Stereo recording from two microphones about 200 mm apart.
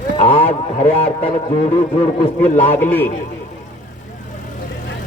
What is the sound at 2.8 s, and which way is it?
Speech, 10° left (ahead or behind).